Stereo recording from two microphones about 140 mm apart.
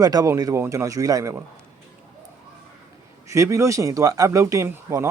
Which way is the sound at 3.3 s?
20° right (ahead or behind).